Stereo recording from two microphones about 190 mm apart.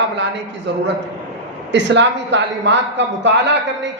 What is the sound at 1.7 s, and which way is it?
A man's voice, 65° right (ahead or behind).